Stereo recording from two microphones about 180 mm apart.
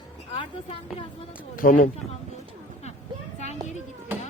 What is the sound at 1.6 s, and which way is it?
Speech, 50° left (ahead or behind).